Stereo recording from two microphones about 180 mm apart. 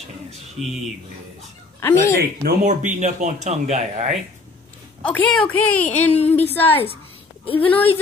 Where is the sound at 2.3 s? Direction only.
50° right (ahead or behind).